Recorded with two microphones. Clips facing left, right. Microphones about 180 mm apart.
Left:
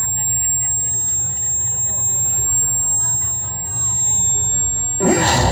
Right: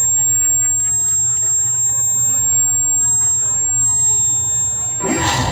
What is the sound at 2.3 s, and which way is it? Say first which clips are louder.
Vehicle: even; 75° right (ahead or behind).